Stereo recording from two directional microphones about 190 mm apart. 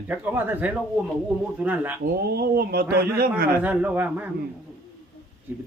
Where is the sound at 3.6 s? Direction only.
10° right (ahead or behind).